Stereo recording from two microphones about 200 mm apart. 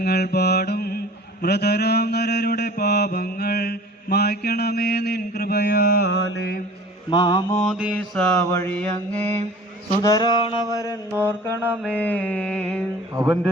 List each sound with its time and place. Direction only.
0.0 s mantra: 55° left (ahead or behind)
7.1 s mantra: 20° left (ahead or behind)
7.5 s a sound: 5° left (ahead or behind)
7.8 s mantra: centre (ahead or behind)
11.6 s mantra: 10° right (ahead or behind)
11.9 s a sound: 5° left (ahead or behind)
13.1 s mantra: 15° right (ahead or behind)